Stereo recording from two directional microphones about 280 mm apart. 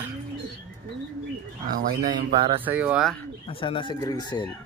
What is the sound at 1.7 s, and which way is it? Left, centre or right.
Speech, right.